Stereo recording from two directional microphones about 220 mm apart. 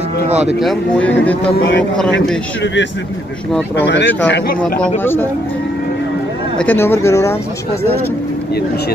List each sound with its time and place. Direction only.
0.6 s speech: 5° left (ahead or behind)
2.6 s a man's voice: 55° left (ahead or behind)
4.3 s speech: 40° left (ahead or behind)
4.9 s speech: 10° left (ahead or behind)
6.6 s speech: 10° left (ahead or behind)